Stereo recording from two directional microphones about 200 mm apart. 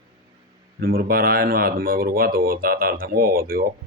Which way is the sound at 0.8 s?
50° right (ahead or behind).